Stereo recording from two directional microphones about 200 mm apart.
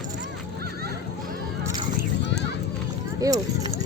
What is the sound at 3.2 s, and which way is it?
Speech, 20° right (ahead or behind).